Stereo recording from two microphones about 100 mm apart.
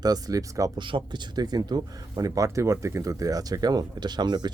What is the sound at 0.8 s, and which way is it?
Speech, 55° right (ahead or behind).